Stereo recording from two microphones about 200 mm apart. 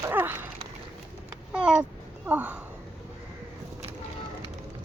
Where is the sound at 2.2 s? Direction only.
10° right (ahead or behind).